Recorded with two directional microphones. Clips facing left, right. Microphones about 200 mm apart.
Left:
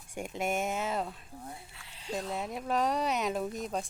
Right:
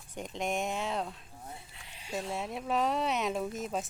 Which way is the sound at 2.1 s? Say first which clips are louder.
Even; centre (ahead or behind).